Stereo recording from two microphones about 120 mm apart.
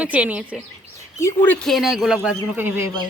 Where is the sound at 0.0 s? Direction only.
10° right (ahead or behind).